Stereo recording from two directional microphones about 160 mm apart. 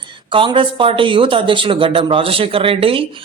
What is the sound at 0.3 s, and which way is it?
Speech, 30° right (ahead or behind).